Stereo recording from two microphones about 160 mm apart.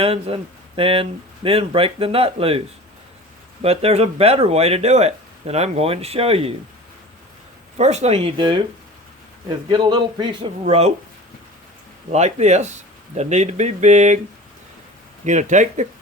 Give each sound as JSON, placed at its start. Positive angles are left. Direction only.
{"t": 0.0, "sound": "speech", "side_deg": -35}
{"t": 7.8, "sound": "a man's voice", "side_deg": -45}
{"t": 10.6, "sound": "speech", "side_deg": -40}
{"t": 12.1, "sound": "speech", "side_deg": -45}
{"t": 15.2, "sound": "speech", "side_deg": -50}